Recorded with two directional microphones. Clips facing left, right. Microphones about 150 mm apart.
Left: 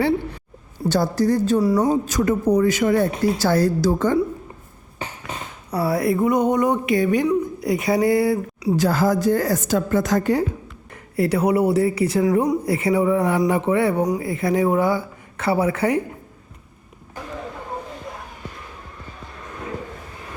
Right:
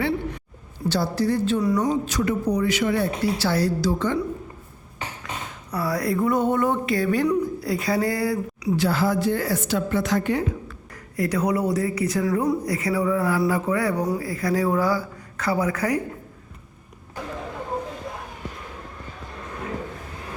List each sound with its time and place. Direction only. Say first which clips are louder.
0.9 s speech: left 4 dB; 50° left (ahead or behind)
5.7 s a woman's voice: left 4 dB; 25° left (ahead or behind)
8.7 s speech: left 3 dB; 45° left (ahead or behind)
10.9 s a woman's voice: left 4 dB; 30° left (ahead or behind)